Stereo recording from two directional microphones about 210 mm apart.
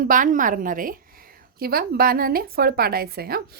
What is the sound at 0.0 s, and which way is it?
A woman's voice, 40° right (ahead or behind).